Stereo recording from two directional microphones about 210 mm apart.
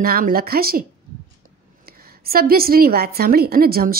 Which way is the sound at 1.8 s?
45° right (ahead or behind).